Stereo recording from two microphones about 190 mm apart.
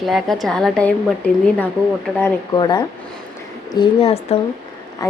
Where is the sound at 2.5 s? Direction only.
20° left (ahead or behind).